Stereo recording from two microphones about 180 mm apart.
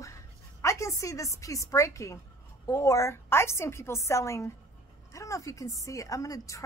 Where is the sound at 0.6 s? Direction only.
15° left (ahead or behind).